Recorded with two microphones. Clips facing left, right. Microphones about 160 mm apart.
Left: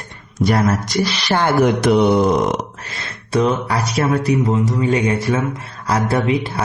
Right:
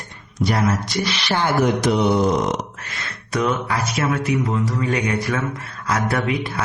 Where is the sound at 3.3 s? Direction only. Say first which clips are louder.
Left 4 dB; 30° left (ahead or behind).